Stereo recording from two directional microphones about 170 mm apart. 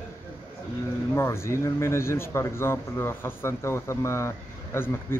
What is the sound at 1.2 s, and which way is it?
Speech, 15° left (ahead or behind).